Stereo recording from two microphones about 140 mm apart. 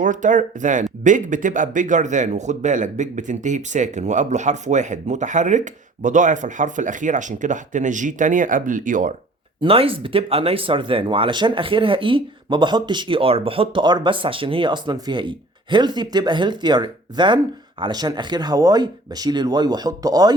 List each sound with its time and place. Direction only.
0.0 s a man's voice: 65° right (ahead or behind)
9.6 s speech: 40° right (ahead or behind)